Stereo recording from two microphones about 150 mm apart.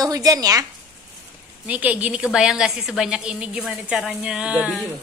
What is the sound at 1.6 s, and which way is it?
A woman's voice, 10° right (ahead or behind).